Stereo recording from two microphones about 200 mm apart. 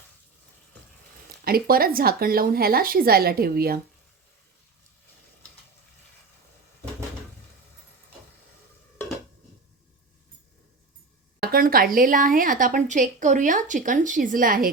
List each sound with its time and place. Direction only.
1.5 s speech: 45° right (ahead or behind)
11.3 s a woman's voice: 45° right (ahead or behind)